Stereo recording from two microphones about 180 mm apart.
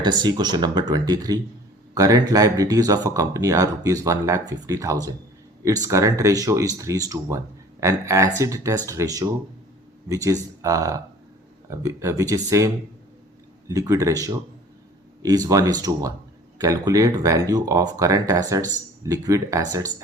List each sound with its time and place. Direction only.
0.0 s speech: 25° right (ahead or behind)